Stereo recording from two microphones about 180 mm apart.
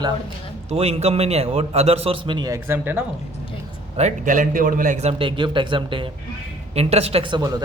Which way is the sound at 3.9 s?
40° right (ahead or behind).